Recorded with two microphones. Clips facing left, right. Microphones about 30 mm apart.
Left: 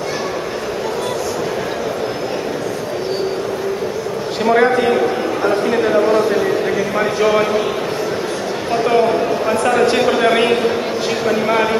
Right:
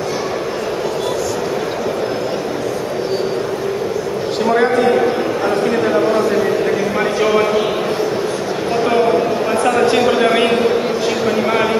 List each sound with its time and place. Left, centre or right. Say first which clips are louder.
4.5 s a man's voice: left 1 dB; centre
8.8 s a man's voice: even; centre